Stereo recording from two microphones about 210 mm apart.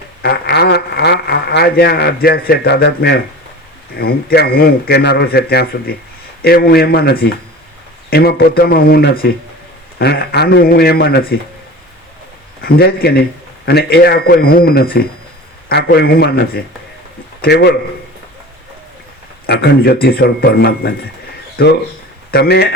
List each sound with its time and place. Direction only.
0.2 s a man's voice: 50° left (ahead or behind)
12.6 s speech: 45° left (ahead or behind)
19.5 s speech: 50° left (ahead or behind)
21.5 s a sound: 50° left (ahead or behind)
22.3 s speech: 50° left (ahead or behind)